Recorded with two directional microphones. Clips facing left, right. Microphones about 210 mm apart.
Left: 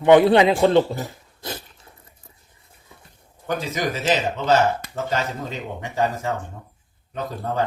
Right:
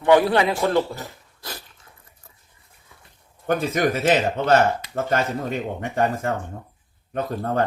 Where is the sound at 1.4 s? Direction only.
25° left (ahead or behind).